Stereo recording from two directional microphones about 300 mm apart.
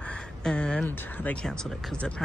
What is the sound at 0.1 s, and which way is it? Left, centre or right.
Speech, centre.